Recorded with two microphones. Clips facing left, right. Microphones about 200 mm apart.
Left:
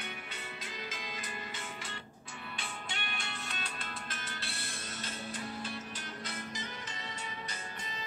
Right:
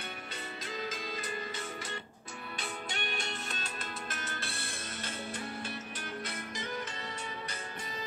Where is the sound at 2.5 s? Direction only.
40° right (ahead or behind).